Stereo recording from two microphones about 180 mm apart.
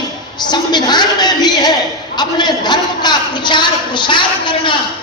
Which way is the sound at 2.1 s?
25° left (ahead or behind).